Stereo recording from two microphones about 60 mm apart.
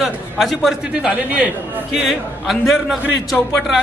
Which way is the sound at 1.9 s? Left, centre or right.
Centre.